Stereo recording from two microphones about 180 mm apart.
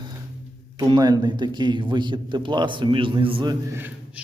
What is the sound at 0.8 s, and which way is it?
Speech, 25° right (ahead or behind).